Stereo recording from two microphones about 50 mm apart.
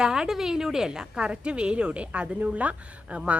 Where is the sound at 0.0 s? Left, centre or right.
Centre.